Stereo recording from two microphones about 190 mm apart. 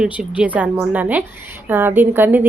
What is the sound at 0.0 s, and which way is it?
A woman's voice, 5° right (ahead or behind).